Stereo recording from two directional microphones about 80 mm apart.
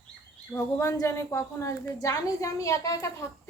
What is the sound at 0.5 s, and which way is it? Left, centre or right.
A woman's voice, left.